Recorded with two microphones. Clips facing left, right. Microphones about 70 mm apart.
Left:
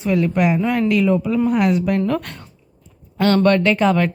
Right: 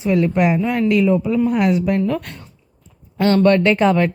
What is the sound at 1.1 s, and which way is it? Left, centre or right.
Speech, centre.